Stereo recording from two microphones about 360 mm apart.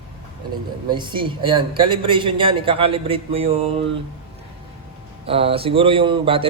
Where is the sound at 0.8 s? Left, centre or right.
Centre.